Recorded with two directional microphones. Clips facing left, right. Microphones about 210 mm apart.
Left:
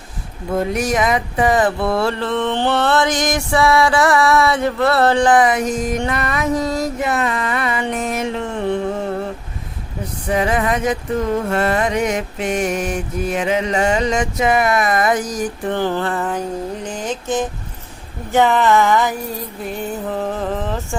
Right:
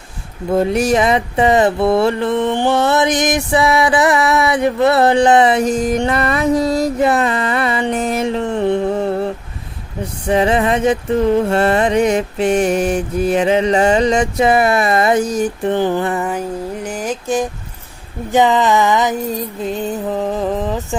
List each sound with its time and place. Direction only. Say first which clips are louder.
0.7 s mantra: right 2 dB; 30° right (ahead or behind)
10.2 s mantra: right 4 dB; 30° right (ahead or behind); by 17.5 s 10° right (ahead or behind)
18.3 s music: right 1 dB; 15° right (ahead or behind)